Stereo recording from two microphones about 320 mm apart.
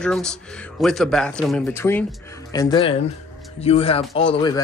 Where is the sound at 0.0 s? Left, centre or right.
Centre.